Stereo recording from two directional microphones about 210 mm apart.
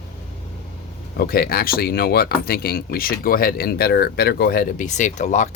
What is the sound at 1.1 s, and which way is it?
Speech, 45° left (ahead or behind).